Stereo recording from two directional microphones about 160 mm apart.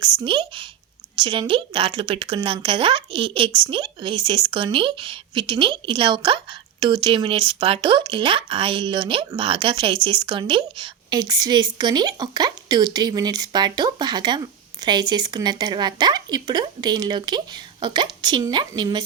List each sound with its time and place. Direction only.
0.3 s speech: 30° right (ahead or behind)